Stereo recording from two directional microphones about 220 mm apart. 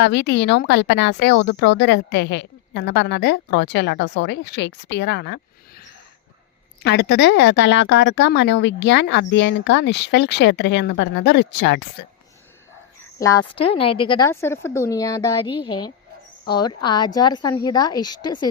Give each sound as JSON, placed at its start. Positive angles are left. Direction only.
{"t": 0.0, "sound": "a woman's voice", "side_deg": 50}
{"t": 13.1, "sound": "a woman's voice", "side_deg": 15}